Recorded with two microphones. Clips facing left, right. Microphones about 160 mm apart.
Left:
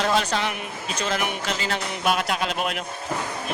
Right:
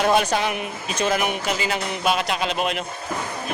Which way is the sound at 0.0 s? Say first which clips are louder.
Right 3 dB; 15° right (ahead or behind).